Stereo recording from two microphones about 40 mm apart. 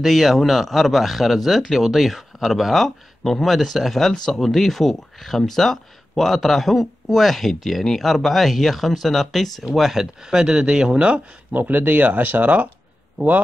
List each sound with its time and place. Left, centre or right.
0.0 s speech: centre
10.2 s a man's voice: centre
11.5 s speech: right